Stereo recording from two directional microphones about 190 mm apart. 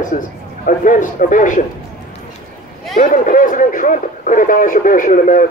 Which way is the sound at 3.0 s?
45° left (ahead or behind).